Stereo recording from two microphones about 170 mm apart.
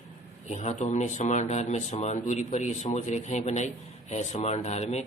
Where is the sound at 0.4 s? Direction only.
40° left (ahead or behind).